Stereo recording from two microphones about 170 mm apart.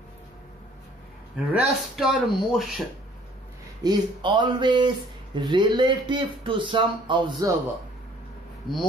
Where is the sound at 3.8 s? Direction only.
25° right (ahead or behind).